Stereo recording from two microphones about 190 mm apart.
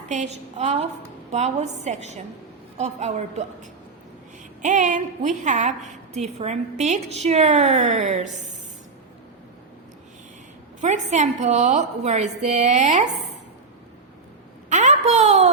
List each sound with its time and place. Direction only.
0.1 s a woman's voice: 35° right (ahead or behind)
10.8 s a woman's voice: 40° right (ahead or behind)
14.7 s a sound: 40° right (ahead or behind)